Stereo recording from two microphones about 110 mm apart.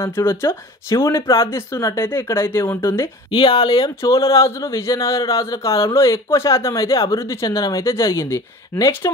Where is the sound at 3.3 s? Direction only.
45° left (ahead or behind).